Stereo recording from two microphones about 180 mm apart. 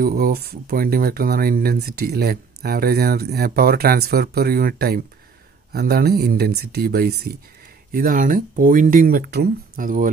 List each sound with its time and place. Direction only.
0.0 s speech: 55° right (ahead or behind)
7.9 s speech: 50° right (ahead or behind)